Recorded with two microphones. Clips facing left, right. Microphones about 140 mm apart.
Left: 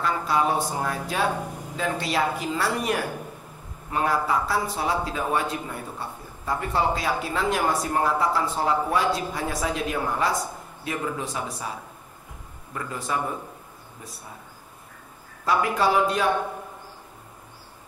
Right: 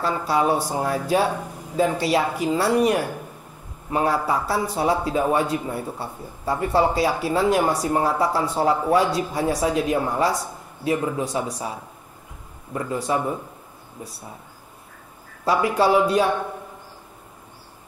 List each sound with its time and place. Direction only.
0.0 s speech: 30° right (ahead or behind)
12.7 s speech: 30° right (ahead or behind)
15.4 s speech: 30° right (ahead or behind)